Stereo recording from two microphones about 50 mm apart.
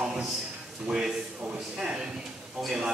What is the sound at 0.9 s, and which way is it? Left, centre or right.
Speech, centre.